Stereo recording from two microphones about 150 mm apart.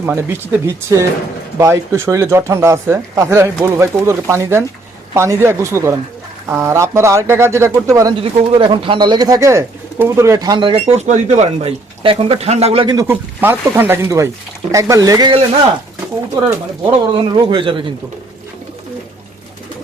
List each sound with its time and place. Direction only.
0.0 s speech: 15° right (ahead or behind)
8.2 s speech: 40° right (ahead or behind)
12.9 s speech: 20° right (ahead or behind)
17.2 s speech: 30° right (ahead or behind)